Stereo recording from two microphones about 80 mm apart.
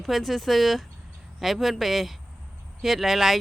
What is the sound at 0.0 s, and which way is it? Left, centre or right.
Speech, centre.